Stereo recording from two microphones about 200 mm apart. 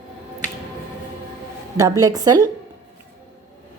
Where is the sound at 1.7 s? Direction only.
20° right (ahead or behind).